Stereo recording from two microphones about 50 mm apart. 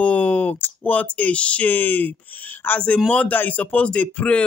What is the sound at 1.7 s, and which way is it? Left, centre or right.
Speech, left.